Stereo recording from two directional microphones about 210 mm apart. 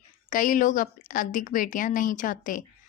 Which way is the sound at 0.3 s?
40° left (ahead or behind).